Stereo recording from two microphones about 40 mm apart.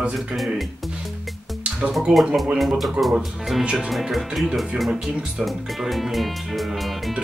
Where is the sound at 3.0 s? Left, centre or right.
Right.